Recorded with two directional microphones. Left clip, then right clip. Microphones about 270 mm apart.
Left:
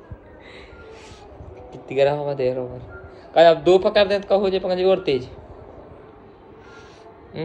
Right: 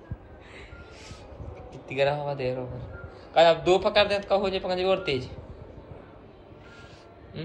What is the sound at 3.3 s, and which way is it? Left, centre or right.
Speech, left.